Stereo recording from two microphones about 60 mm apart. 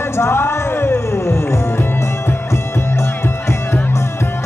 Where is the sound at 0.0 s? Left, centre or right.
Left.